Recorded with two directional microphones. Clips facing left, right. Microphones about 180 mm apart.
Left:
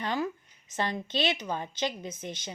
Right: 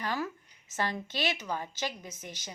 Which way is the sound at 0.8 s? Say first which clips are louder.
Left 3 dB; 20° left (ahead or behind).